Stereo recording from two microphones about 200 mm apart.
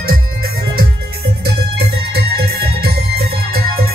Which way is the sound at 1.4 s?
55° right (ahead or behind).